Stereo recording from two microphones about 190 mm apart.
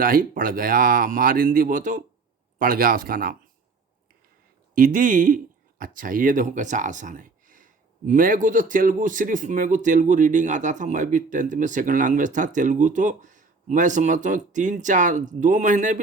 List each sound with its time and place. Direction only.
0.0 s speech: 45° right (ahead or behind)
4.7 s speech: 45° right (ahead or behind)